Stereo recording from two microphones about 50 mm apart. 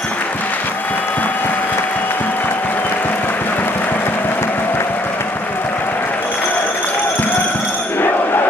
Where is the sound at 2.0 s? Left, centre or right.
Left.